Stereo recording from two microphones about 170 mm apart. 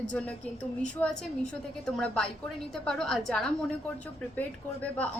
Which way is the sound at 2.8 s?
5° left (ahead or behind).